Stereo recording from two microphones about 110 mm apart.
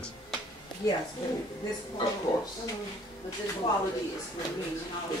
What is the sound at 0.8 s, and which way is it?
Speech, 35° left (ahead or behind).